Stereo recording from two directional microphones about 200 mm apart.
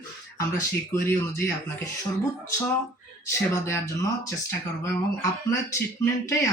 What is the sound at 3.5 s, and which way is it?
Speech, 15° left (ahead or behind).